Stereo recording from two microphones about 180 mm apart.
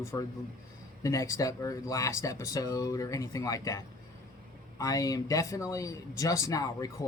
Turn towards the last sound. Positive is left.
turn(degrees=20)  # may be behind; listen again after turning